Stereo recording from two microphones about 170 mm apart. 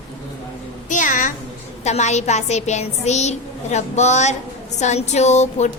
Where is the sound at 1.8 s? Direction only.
40° left (ahead or behind).